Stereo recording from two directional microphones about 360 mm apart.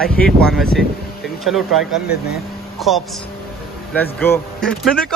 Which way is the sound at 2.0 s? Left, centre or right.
Left.